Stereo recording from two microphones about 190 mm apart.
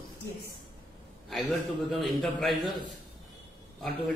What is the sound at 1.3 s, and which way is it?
A man's voice, centre (ahead or behind).